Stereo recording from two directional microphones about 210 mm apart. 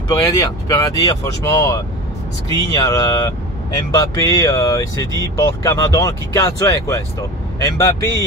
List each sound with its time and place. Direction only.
0.1 s speech: 15° left (ahead or behind)